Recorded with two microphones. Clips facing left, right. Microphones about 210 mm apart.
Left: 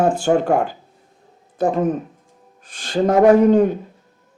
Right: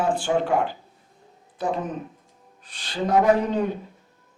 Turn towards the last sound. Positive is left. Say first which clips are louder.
# left 9 dB
turn(degrees=45)  # may be behind; listen again after turning